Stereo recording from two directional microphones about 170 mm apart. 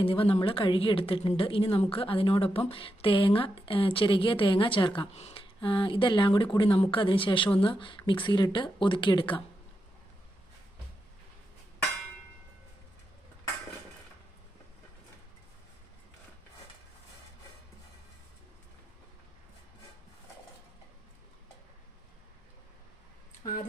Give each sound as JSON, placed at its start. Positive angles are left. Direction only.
{"t": 0.0, "sound": "a woman's voice", "side_deg": 35}